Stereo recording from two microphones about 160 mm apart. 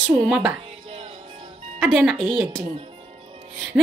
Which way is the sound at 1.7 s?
5° right (ahead or behind).